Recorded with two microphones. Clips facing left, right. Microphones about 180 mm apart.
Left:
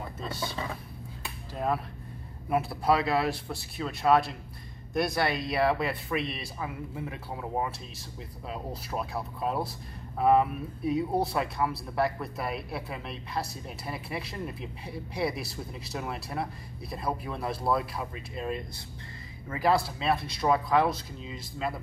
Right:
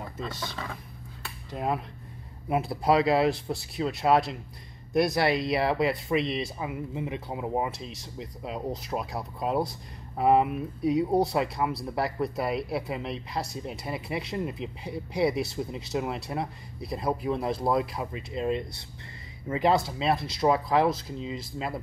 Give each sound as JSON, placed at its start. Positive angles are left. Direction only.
{"t": 0.2, "sound": "speech", "side_deg": 5}
{"t": 1.5, "sound": "speech", "side_deg": -20}